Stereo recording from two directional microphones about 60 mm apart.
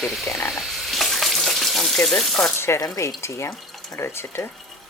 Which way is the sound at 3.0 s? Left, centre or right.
Left.